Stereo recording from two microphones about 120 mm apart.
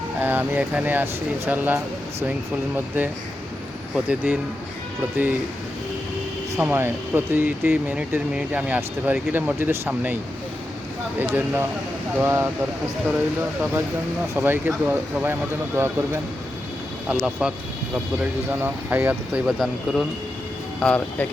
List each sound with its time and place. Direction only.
0.2 s speech: 15° right (ahead or behind)
3.9 s speech: 10° right (ahead or behind)
6.6 s speech: 15° right (ahead or behind)
11.2 s speech: 15° right (ahead or behind)
14.3 s speech: 15° right (ahead or behind)
17.1 s speech: 5° right (ahead or behind)
18.6 s speech: 15° right (ahead or behind)
19.5 s speech: centre (ahead or behind)
20.7 s speech: 10° left (ahead or behind)